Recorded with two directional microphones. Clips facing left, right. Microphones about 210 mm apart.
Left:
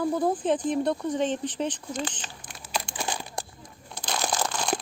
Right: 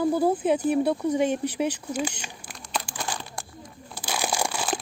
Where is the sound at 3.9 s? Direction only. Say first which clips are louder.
Right 1 dB; 10° right (ahead or behind).